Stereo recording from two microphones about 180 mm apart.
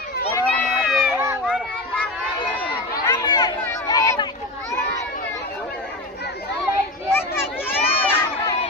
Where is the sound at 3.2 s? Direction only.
25° left (ahead or behind).